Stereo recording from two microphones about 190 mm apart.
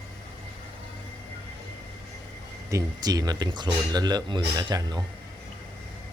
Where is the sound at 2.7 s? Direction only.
20° right (ahead or behind).